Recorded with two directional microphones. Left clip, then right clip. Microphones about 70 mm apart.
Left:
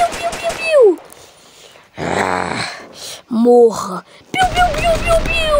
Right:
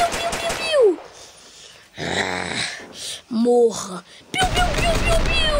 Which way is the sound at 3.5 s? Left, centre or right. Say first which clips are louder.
Left 7 dB; left.